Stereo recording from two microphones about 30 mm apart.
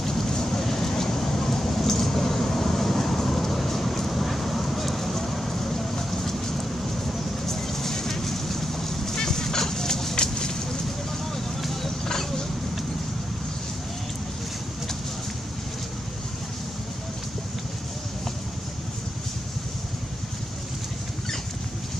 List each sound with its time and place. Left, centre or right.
0.0 s vehicle: centre
10.1 s a sound: left
11.6 s vehicle: centre
12.1 s vehicle: left